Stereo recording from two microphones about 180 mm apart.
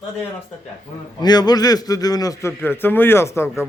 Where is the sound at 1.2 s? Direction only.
20° left (ahead or behind).